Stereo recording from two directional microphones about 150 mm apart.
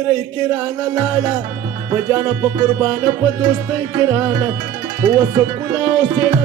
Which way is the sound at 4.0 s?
20° right (ahead or behind).